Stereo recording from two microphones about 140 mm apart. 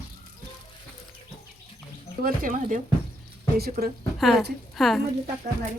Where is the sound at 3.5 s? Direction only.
90° right.